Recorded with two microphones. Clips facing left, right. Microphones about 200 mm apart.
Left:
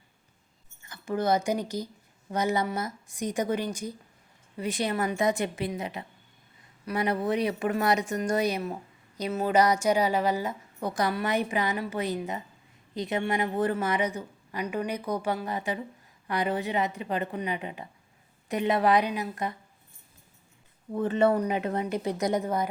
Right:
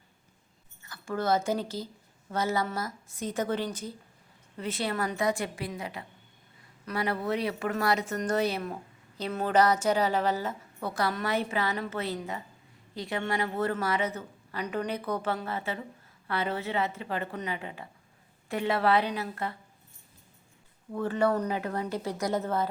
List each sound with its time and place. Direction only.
0.8 s a woman's voice: 20° left (ahead or behind)
20.9 s a woman's voice: 20° left (ahead or behind)